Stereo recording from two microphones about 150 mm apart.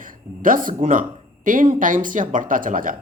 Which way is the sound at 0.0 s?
65° right (ahead or behind).